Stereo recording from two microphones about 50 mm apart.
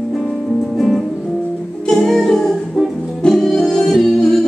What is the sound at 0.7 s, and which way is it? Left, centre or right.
Music, centre.